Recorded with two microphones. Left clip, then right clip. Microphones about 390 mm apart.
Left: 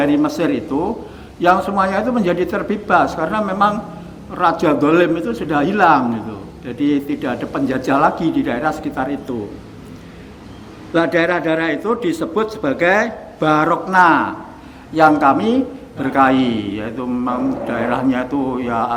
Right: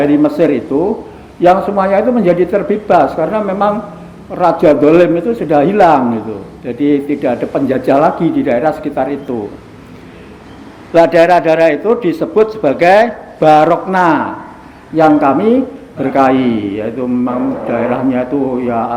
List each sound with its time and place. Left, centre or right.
0.0 s a man's voice: left
11.0 s a man's voice: left